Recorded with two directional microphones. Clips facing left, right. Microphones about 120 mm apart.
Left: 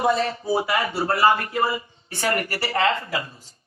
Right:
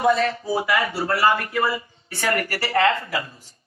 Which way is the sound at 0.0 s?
25° left (ahead or behind).